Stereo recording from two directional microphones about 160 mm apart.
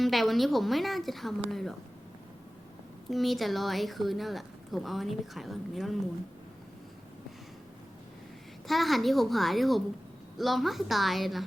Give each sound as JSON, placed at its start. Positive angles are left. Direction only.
{"t": 0.0, "sound": "speech", "side_deg": 0}
{"t": 3.1, "sound": "speech", "side_deg": 0}
{"t": 8.6, "sound": "speech", "side_deg": 0}